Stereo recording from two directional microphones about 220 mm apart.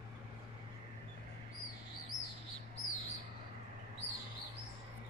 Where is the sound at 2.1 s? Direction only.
55° left (ahead or behind).